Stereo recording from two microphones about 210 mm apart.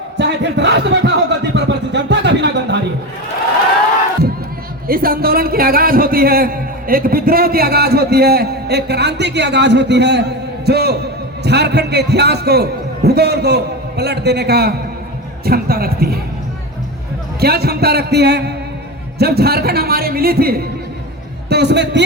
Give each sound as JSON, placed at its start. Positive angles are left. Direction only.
{"t": 0.2, "sound": "speech", "side_deg": -55}
{"t": 4.9, "sound": "a man's voice", "side_deg": -45}
{"t": 17.4, "sound": "a man's voice", "side_deg": -50}